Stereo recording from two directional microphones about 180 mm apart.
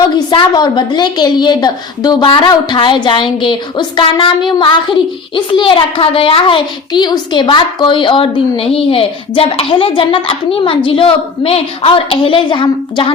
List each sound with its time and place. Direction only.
0.3 s a child's voice: 25° left (ahead or behind)